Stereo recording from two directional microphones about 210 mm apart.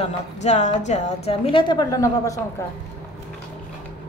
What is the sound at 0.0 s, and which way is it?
A woman's voice, 35° left (ahead or behind).